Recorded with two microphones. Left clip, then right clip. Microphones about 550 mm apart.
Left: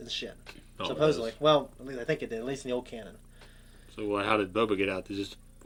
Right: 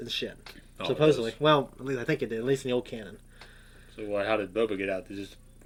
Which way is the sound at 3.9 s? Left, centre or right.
Left.